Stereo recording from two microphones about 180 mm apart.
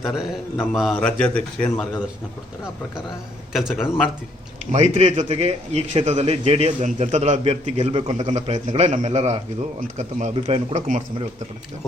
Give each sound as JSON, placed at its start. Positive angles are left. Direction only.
{"t": 0.1, "sound": "a man's voice", "side_deg": 0}
{"t": 3.5, "sound": "a man's voice", "side_deg": 0}
{"t": 4.7, "sound": "a man's voice", "side_deg": -40}